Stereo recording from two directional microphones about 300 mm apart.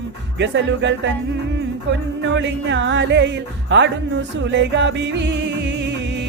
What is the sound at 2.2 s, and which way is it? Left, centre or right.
Speech, right.